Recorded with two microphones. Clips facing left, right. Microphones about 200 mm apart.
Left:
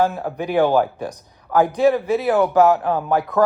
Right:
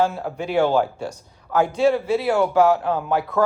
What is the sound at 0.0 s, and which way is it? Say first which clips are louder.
Speech: left 2 dB; 15° left (ahead or behind).